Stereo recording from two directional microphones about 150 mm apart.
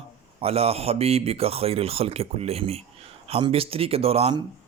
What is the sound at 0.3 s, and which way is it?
Speech, 40° right (ahead or behind).